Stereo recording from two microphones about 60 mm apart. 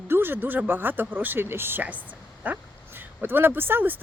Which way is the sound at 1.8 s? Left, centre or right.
Right.